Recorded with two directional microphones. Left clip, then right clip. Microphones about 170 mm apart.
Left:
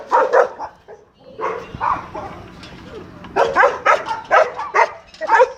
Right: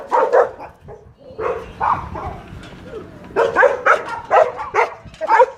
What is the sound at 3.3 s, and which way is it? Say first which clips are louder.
Dog: even; 25° left (ahead or behind).